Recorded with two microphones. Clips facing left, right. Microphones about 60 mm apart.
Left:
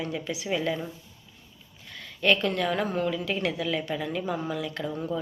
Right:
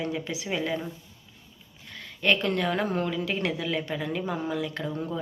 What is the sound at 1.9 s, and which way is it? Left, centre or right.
Speech, right.